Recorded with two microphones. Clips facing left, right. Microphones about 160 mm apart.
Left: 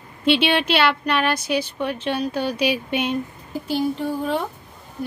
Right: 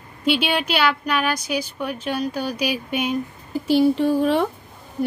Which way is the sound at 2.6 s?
5° right (ahead or behind).